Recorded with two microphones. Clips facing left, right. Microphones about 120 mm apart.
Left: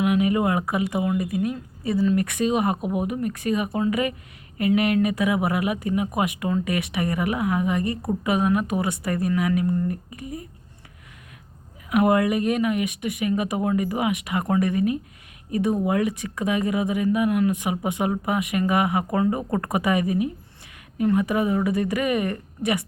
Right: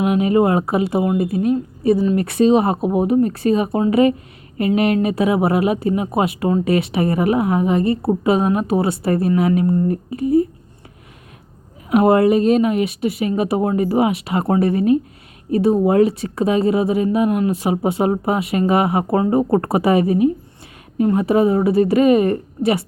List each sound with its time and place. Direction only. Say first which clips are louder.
0.0 s speech: right 5 dB; 25° right (ahead or behind)
11.9 s speech: right 6 dB; 30° right (ahead or behind)